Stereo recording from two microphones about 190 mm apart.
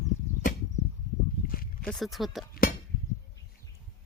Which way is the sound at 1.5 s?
50° left (ahead or behind).